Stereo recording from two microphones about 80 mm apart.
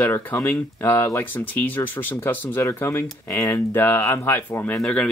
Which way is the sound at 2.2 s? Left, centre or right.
Left.